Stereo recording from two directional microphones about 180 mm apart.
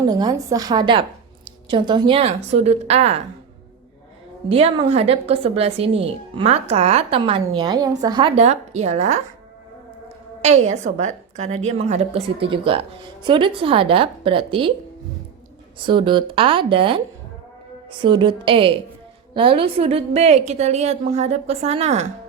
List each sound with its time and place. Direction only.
0.0 s a woman's voice: 20° right (ahead or behind)
4.4 s a woman's voice: 35° right (ahead or behind)
8.4 s a woman's voice: 40° right (ahead or behind)
10.4 s a woman's voice: 40° right (ahead or behind)
15.8 s a woman's voice: 25° right (ahead or behind)
18.0 s a woman's voice: 25° right (ahead or behind)